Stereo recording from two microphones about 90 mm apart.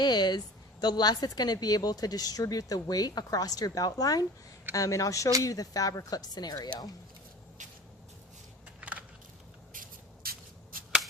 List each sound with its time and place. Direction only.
0.0 s a woman's voice: 55° left (ahead or behind)
8.8 s crushing: 15° right (ahead or behind)